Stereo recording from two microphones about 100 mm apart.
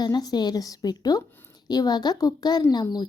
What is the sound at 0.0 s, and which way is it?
A woman's voice, 40° left (ahead or behind).